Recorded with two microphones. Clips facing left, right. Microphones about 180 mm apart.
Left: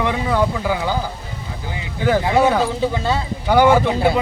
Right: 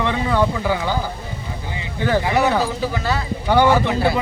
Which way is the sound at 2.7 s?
20° left (ahead or behind).